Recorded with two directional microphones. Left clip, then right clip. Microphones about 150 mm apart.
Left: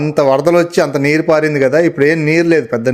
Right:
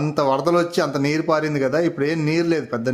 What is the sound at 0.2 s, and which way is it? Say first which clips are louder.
A man's voice: left 8 dB; 20° left (ahead or behind).